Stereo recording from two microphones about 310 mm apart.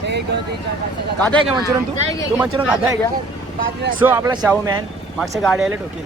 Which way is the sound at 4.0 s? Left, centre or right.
Centre.